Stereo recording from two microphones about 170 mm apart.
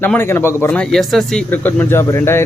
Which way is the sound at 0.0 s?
15° left (ahead or behind).